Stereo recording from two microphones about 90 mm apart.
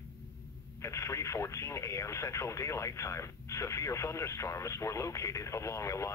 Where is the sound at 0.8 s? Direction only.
35° left (ahead or behind).